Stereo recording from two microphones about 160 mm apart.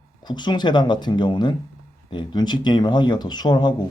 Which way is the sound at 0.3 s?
25° left (ahead or behind).